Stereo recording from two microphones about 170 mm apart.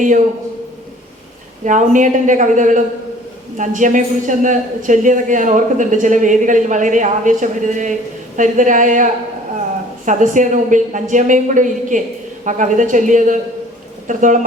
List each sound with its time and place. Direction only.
1.6 s a woman's voice: 45° right (ahead or behind)